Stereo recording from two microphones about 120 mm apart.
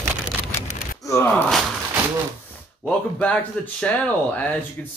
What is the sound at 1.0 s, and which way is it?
Gasp, 25° left (ahead or behind).